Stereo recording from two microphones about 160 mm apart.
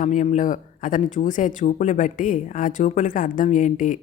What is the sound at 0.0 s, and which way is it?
Speech, 50° left (ahead or behind).